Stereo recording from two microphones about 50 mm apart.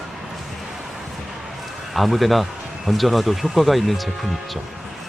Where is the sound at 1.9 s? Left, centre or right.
Centre.